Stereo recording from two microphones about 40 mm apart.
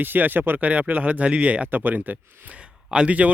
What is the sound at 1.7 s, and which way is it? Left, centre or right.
Speech, right.